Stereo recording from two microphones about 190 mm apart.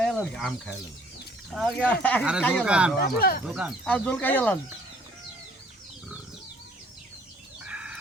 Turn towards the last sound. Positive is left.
turn(degrees=-5)  # may be behind; listen again after turning